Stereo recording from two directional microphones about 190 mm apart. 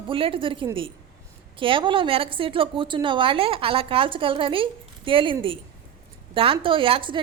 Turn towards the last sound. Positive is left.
turn(degrees=-25)  # may be behind; listen again after turning